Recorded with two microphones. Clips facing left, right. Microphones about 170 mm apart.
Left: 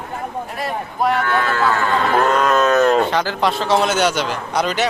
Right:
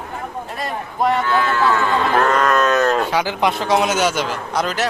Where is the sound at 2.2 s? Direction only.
25° left (ahead or behind).